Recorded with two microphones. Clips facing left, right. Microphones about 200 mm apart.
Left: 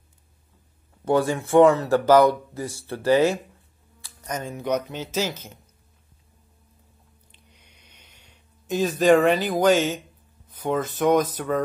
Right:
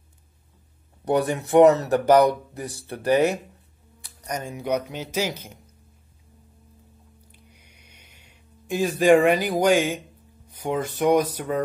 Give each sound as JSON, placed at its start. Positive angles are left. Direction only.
{"t": 1.3, "sound": "speech", "side_deg": -20}
{"t": 4.4, "sound": "speech", "side_deg": -15}
{"t": 7.5, "sound": "a sound", "side_deg": -10}
{"t": 10.5, "sound": "speech", "side_deg": -15}